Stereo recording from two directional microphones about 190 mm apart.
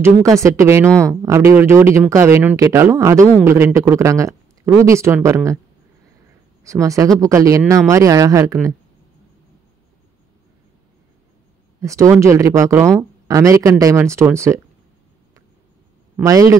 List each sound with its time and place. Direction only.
0.0 s speech: 15° right (ahead or behind)
0.8 s speech: 5° left (ahead or behind)
1.2 s speech: 15° right (ahead or behind)
6.6 s speech: 15° right (ahead or behind)
11.8 s speech: 15° right (ahead or behind)
16.3 s speech: 15° right (ahead or behind)